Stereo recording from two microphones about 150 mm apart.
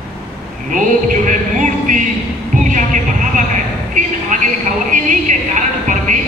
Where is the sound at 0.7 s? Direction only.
60° right (ahead or behind).